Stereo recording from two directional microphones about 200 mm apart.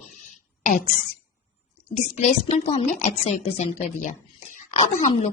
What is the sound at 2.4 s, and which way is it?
A woman's voice, 35° left (ahead or behind).